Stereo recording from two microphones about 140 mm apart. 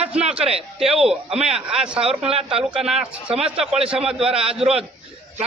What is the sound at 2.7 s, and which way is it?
Speech, 5° right (ahead or behind).